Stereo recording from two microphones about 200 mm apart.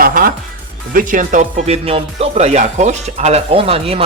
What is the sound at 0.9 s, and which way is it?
Speech, 40° right (ahead or behind).